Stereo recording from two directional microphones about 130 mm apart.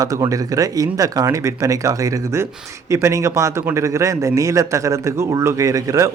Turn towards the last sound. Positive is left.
turn(degrees=-25)  # may be behind; listen again after turning